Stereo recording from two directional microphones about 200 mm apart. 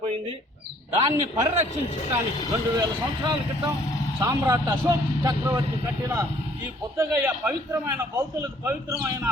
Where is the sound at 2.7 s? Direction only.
20° right (ahead or behind).